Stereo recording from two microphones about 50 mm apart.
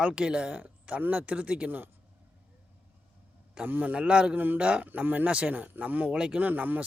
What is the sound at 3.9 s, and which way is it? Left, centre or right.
Speech, right.